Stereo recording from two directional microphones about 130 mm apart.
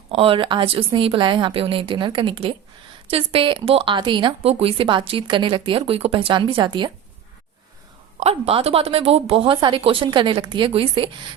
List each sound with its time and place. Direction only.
0.1 s speech: 45° right (ahead or behind)
8.2 s speech: 50° right (ahead or behind)